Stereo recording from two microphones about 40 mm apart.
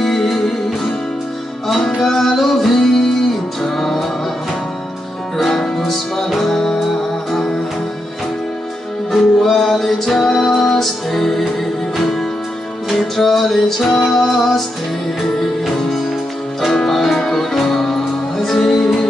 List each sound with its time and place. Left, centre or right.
0.0 s music: centre
2.0 s music: centre
5.4 s music: centre
9.1 s music: centre
12.9 s music: centre
16.7 s music: centre